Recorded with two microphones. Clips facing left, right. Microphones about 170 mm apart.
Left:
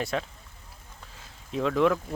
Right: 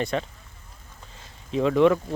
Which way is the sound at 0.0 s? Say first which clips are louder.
Right 3 dB; centre (ahead or behind).